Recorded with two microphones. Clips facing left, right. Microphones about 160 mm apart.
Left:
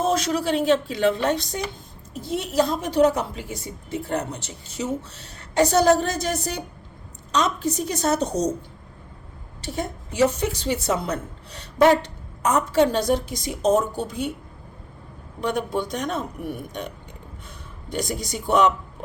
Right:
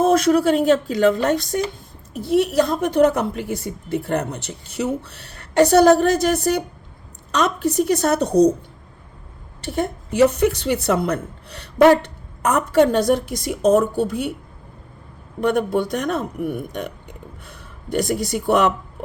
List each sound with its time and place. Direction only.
0.0 s a woman's voice: 55° right (ahead or behind)
9.6 s a woman's voice: 60° right (ahead or behind)
15.4 s a woman's voice: 55° right (ahead or behind)
17.9 s a woman's voice: 60° right (ahead or behind)